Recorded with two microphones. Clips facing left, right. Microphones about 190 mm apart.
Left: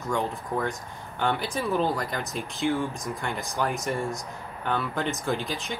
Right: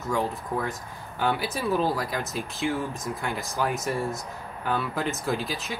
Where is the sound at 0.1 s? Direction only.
5° right (ahead or behind).